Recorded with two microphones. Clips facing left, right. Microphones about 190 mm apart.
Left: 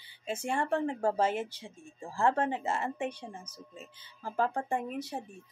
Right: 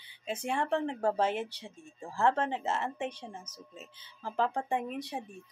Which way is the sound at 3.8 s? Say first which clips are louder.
Left 1 dB; 50° left (ahead or behind).